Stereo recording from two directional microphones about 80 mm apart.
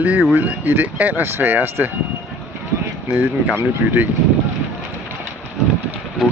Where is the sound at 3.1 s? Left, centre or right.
Centre.